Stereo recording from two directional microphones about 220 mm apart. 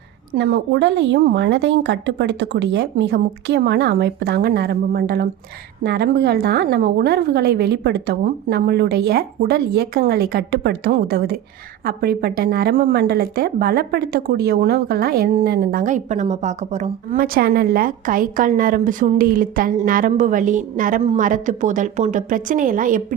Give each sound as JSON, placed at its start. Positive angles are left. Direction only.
{"t": 0.3, "sound": "a woman's voice", "side_deg": -50}